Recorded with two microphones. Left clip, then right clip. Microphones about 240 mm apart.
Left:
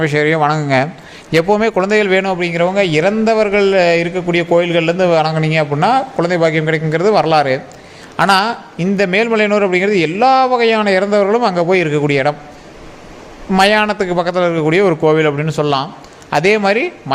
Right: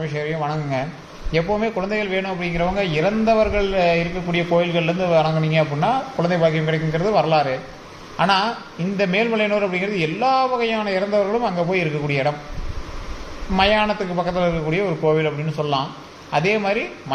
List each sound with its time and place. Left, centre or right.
0.0 s a man's voice: left
13.6 s a man's voice: left